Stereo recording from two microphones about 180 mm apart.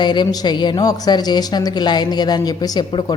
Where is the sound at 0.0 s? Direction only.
25° left (ahead or behind).